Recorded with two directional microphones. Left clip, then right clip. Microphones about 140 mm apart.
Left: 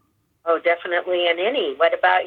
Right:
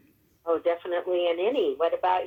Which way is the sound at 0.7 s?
20° left (ahead or behind).